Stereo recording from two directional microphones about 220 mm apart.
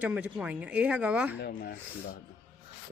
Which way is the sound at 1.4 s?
45° left (ahead or behind).